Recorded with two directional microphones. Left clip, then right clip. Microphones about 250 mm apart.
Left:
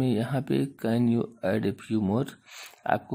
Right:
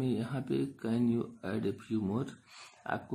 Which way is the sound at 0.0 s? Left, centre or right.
Left.